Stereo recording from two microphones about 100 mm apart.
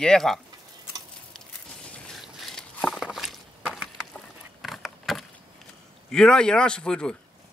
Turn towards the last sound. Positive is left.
turn(degrees=10)  # may be behind; listen again after turning